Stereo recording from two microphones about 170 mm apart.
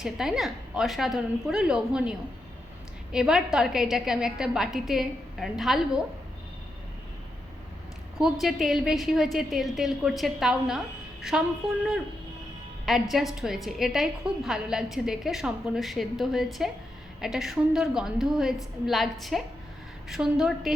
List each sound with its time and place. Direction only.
0.0 s a woman's voice: centre (ahead or behind)
8.2 s a woman's voice: centre (ahead or behind)
12.8 s a woman's voice: centre (ahead or behind)